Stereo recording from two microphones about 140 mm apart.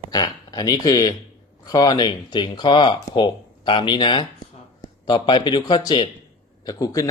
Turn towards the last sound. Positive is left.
turn(degrees=25)  # may be behind; listen again after turning